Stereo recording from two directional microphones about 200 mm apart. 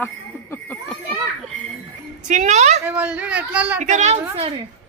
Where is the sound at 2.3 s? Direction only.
35° right (ahead or behind).